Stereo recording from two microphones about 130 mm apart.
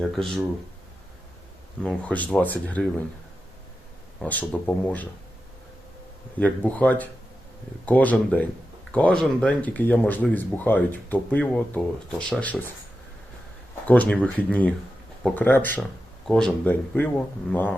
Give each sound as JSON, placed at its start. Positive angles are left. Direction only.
{"t": 0.2, "sound": "speech", "side_deg": 5}
{"t": 1.8, "sound": "speech", "side_deg": 10}
{"t": 4.2, "sound": "speech", "side_deg": 10}
{"t": 6.4, "sound": "speech", "side_deg": 10}
{"t": 13.8, "sound": "speech", "side_deg": 10}